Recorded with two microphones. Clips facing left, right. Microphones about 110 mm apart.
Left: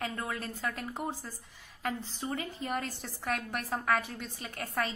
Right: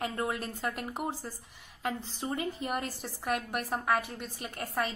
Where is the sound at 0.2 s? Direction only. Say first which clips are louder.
Right 3 dB; 20° right (ahead or behind).